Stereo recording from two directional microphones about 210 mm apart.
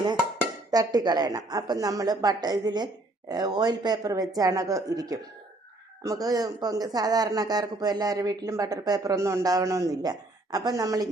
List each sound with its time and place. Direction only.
0.7 s speech: 20° right (ahead or behind)